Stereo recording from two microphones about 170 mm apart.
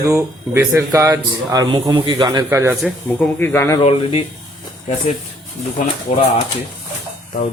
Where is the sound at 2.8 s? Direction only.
5° left (ahead or behind).